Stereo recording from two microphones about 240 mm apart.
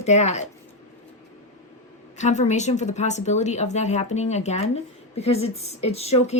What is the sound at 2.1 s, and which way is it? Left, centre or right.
A woman's voice, left.